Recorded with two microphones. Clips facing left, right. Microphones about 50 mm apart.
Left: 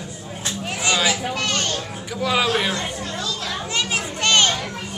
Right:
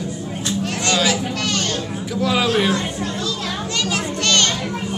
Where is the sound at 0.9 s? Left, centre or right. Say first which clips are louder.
Right 1 dB; centre.